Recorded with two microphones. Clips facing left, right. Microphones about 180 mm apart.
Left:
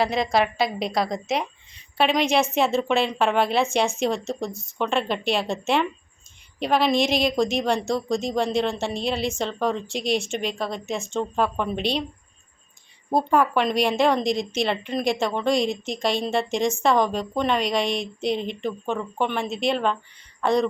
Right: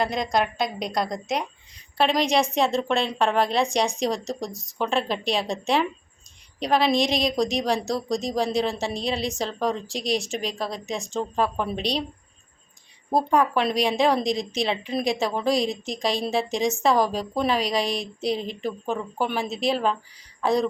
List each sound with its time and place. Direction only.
0.0 s speech: 5° left (ahead or behind)
13.1 s speech: centre (ahead or behind)